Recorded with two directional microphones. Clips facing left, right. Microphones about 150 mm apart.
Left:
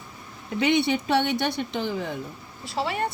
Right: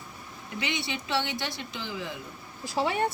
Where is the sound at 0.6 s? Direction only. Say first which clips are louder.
Left 12 dB; 55° left (ahead or behind).